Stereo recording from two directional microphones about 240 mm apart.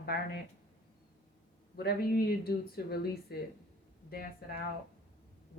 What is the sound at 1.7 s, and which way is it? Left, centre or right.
Speech, left.